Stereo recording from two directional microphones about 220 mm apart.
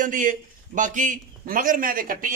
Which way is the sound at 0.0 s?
35° right (ahead or behind).